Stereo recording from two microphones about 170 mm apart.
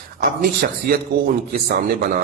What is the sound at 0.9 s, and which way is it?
Speech, 55° right (ahead or behind).